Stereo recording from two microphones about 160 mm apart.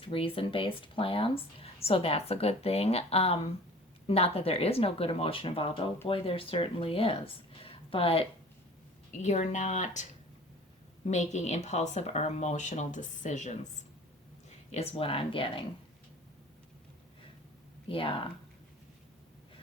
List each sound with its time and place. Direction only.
0.0 s speech: 35° left (ahead or behind)
7.6 s a sound: 35° left (ahead or behind)
9.2 s a woman's voice: 45° left (ahead or behind)
14.7 s speech: 40° left (ahead or behind)
17.8 s speech: 35° left (ahead or behind)